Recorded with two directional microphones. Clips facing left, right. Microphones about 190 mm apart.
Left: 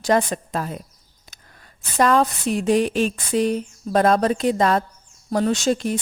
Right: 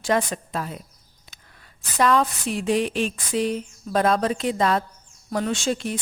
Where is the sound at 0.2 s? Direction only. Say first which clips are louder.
Left 3 dB; 40° left (ahead or behind).